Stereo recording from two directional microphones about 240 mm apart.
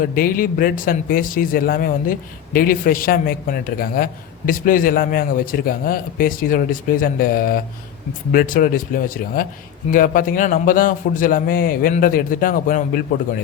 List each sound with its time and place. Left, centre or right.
0.0 s speech: left